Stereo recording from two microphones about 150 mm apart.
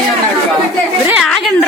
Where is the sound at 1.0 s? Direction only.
10° right (ahead or behind).